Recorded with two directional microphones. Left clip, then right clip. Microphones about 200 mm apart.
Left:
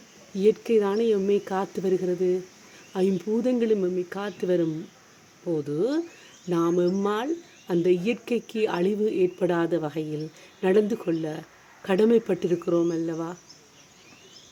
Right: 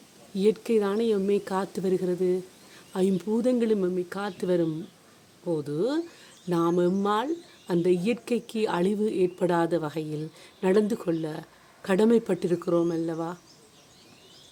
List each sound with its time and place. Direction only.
0.3 s a woman's voice: centre (ahead or behind)